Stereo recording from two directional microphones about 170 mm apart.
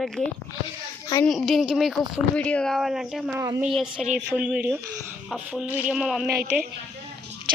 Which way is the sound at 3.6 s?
Centre (ahead or behind).